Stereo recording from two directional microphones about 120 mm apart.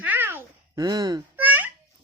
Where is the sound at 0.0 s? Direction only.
15° right (ahead or behind).